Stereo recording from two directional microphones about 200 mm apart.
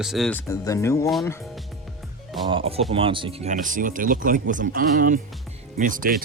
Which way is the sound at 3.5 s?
40° right (ahead or behind).